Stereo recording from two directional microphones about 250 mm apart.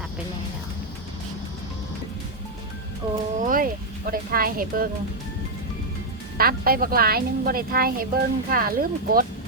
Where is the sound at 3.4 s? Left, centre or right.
Right.